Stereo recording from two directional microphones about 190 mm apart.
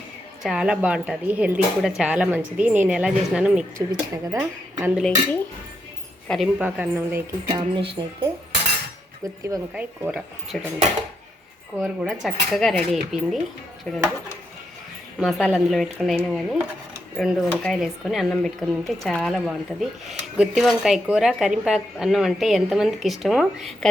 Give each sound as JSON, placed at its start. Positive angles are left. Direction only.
{"t": 0.4, "sound": "speech", "side_deg": -5}
{"t": 4.9, "sound": "speech", "side_deg": 5}
{"t": 7.4, "sound": "speech", "side_deg": -25}
{"t": 9.2, "sound": "speech", "side_deg": -15}
{"t": 9.7, "sound": "speech", "side_deg": -5}
{"t": 11.8, "sound": "speech", "side_deg": -5}
{"t": 15.2, "sound": "speech", "side_deg": 0}